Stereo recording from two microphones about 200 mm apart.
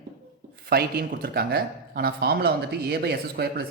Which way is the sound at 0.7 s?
50° right (ahead or behind).